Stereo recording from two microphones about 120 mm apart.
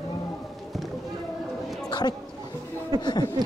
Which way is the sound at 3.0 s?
35° left (ahead or behind).